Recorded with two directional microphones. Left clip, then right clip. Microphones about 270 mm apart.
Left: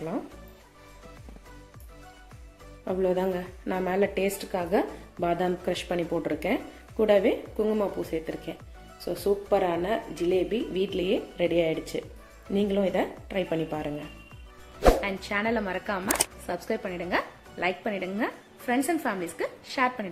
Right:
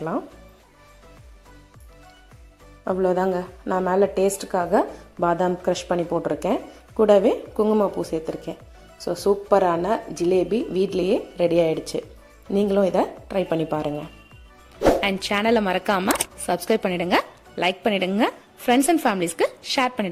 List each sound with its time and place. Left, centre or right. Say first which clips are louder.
2.8 s a woman's voice: right 5 dB; right
15.0 s speech: right 7 dB; right